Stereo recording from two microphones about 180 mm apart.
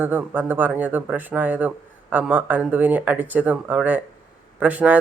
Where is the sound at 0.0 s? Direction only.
10° right (ahead or behind).